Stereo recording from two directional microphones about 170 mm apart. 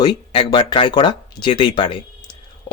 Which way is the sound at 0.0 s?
25° left (ahead or behind).